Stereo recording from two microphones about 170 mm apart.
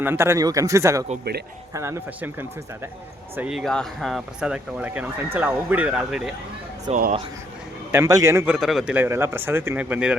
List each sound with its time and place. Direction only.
0.0 s speech: 15° right (ahead or behind)
6.9 s speech: 35° right (ahead or behind)
7.9 s speech: 20° right (ahead or behind)
8.5 s speech: 5° right (ahead or behind)